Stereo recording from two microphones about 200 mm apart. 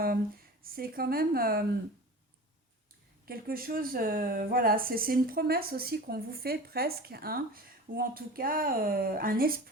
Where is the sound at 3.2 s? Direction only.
45° right (ahead or behind).